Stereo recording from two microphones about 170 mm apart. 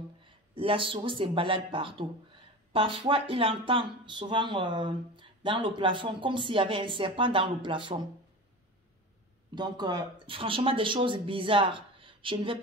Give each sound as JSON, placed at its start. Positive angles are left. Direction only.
{"t": 0.2, "sound": "speech", "side_deg": -30}
{"t": 9.6, "sound": "speech", "side_deg": -25}